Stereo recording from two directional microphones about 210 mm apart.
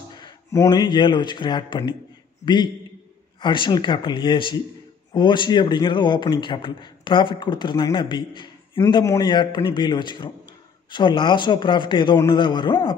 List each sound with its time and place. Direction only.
0.1 s a man's voice: 20° left (ahead or behind)